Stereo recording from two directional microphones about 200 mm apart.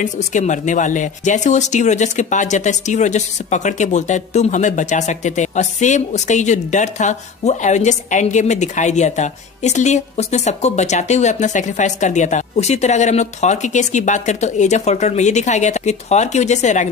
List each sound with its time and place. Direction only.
0.0 s speech: 35° left (ahead or behind)